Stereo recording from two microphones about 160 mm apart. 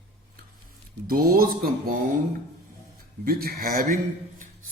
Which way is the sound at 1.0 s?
65° right (ahead or behind).